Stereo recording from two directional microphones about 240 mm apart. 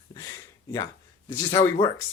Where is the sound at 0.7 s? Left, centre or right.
Centre.